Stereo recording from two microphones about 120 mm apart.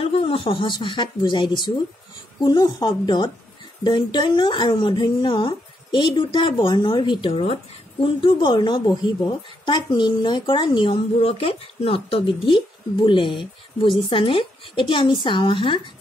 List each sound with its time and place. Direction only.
0.0 s speech: 50° left (ahead or behind)